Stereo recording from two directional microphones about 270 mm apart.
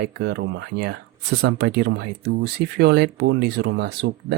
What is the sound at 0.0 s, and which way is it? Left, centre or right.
Speech, right.